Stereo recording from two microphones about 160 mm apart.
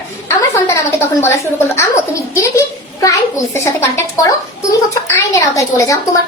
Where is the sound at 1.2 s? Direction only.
20° left (ahead or behind).